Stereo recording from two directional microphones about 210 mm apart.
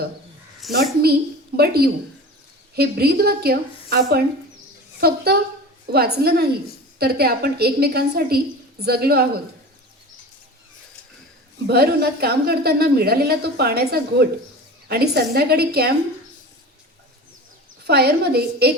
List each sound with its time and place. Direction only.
0.6 s a woman's voice: centre (ahead or behind)
1.5 s a woman's voice: 50° right (ahead or behind)
11.7 s a woman's voice: 50° right (ahead or behind)
17.8 s a woman's voice: 50° right (ahead or behind)